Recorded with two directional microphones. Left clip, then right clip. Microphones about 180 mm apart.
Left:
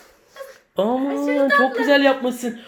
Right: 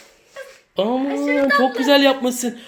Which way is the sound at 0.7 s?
5° right (ahead or behind).